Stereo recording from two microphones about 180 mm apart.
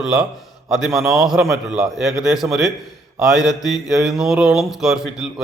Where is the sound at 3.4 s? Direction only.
20° left (ahead or behind).